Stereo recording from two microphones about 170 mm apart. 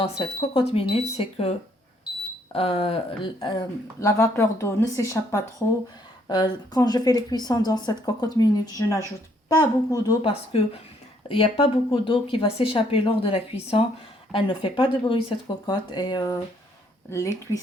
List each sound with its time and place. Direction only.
0.2 s speech: 35° left (ahead or behind)
4.0 s speech: 15° left (ahead or behind)